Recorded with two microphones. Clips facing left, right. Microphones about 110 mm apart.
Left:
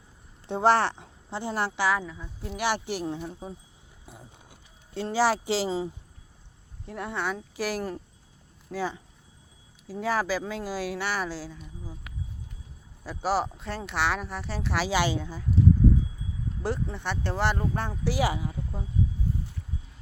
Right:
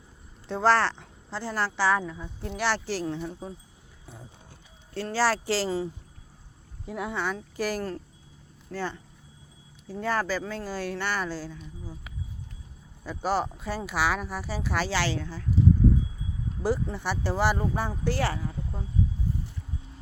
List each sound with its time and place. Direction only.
0.4 s a woman's voice: 20° left (ahead or behind)
4.0 s horse: 10° left (ahead or behind)
4.9 s speech: 15° left (ahead or behind)
6.8 s speech: 5° right (ahead or behind)
14.8 s speech: 15° left (ahead or behind)
16.6 s speech: 5° right (ahead or behind)
18.0 s speech: 10° left (ahead or behind)